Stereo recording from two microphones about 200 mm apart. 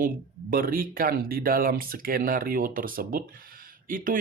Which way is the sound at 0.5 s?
45° right (ahead or behind).